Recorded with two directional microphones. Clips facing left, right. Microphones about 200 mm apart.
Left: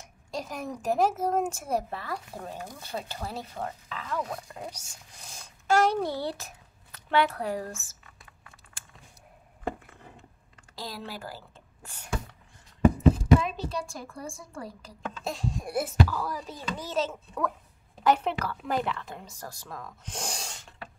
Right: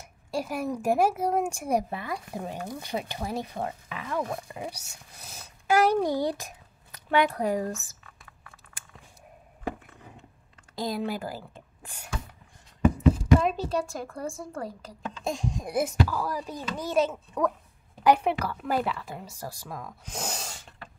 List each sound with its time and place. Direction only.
0.0 s a child's voice: 10° right (ahead or behind)
10.8 s a woman's voice: 15° right (ahead or behind)
13.4 s a woman's voice: 45° right (ahead or behind)
15.2 s a child's voice: 15° right (ahead or behind)